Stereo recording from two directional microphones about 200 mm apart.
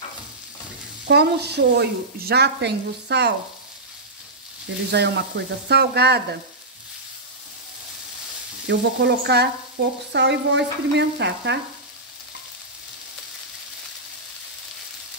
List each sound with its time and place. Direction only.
1.0 s speech: 55° right (ahead or behind)
4.9 s speech: 55° right (ahead or behind)
8.6 s speech: 60° right (ahead or behind)